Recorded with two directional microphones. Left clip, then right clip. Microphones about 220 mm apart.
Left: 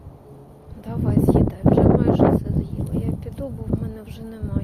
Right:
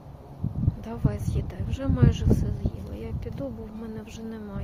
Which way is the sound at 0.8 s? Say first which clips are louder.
Left 15 dB; 10° right (ahead or behind).